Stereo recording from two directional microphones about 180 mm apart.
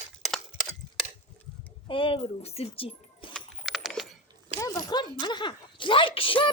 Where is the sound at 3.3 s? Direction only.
Centre (ahead or behind).